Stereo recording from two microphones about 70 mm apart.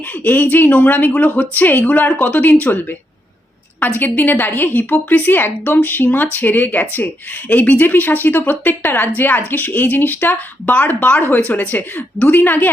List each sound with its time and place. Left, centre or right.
0.3 s speech: left
3.8 s speech: left